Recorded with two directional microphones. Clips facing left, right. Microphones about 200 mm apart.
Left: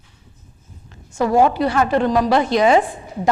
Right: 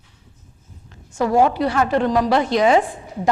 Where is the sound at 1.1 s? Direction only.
15° left (ahead or behind).